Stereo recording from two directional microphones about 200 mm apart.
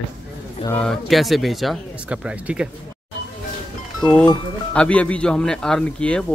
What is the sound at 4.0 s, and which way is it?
A man's voice, 5° left (ahead or behind).